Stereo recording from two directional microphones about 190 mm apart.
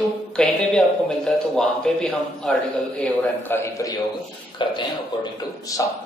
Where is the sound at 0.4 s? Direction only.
5° left (ahead or behind).